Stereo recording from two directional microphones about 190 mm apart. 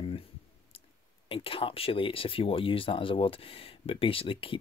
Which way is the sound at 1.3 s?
30° left (ahead or behind).